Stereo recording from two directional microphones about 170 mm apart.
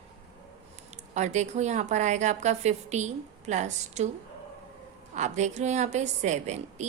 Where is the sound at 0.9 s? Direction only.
45° right (ahead or behind).